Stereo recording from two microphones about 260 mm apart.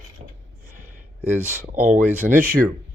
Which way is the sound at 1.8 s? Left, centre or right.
Centre.